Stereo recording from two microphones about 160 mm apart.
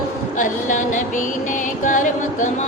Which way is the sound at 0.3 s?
50° left (ahead or behind).